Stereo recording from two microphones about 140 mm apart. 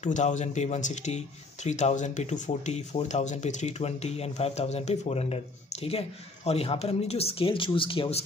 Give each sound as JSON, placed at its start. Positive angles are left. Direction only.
{"t": 0.0, "sound": "speech", "side_deg": 60}